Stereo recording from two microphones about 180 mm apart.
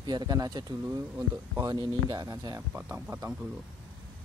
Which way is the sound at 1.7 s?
25° right (ahead or behind).